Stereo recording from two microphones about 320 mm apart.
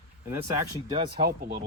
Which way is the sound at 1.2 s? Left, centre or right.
Right.